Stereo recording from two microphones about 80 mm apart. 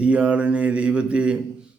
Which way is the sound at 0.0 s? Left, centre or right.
Centre.